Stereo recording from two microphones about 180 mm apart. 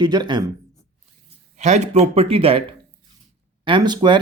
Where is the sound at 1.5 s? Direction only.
40° right (ahead or behind).